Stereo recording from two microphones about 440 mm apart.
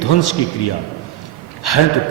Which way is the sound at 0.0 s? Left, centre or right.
Left.